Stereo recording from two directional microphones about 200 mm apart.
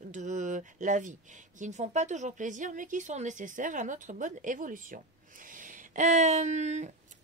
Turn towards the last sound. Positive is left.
turn(degrees=-35)  # may be behind; listen again after turning